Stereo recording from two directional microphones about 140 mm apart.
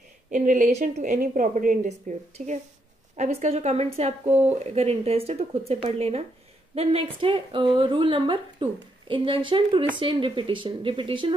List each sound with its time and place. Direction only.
0.3 s a woman's voice: 65° right (ahead or behind); by 11.3 s 40° right (ahead or behind)